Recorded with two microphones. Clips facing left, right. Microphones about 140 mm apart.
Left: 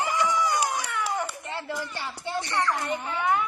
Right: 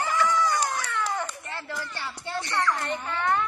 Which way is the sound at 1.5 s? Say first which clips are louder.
Left 3 dB; 15° left (ahead or behind).